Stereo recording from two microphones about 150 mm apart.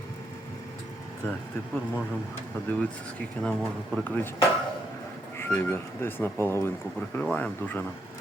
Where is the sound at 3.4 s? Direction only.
5° left (ahead or behind).